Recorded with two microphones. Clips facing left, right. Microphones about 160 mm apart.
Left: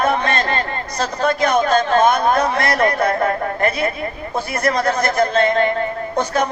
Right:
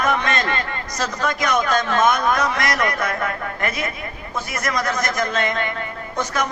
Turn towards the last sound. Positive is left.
turn(degrees=30)  # may be behind; listen again after turning